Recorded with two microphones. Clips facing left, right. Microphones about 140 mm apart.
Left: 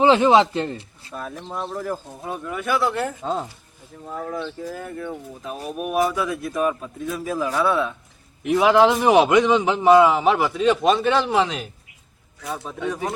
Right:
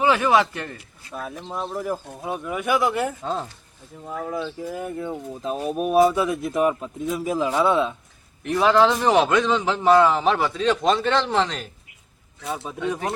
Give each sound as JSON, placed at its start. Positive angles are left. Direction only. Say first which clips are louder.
{"t": 0.0, "sound": "a man's voice", "louder": "left 4 dB", "side_deg": 25}
{"t": 1.1, "sound": "speech", "louder": "even", "side_deg": 0}
{"t": 3.2, "sound": "a man's voice", "louder": "left 2 dB", "side_deg": 10}
{"t": 4.0, "sound": "speech", "louder": "right 1 dB", "side_deg": -5}
{"t": 4.8, "sound": "speech", "louder": "right 2 dB", "side_deg": -20}
{"t": 8.4, "sound": "a man's voice", "louder": "left 2 dB", "side_deg": 10}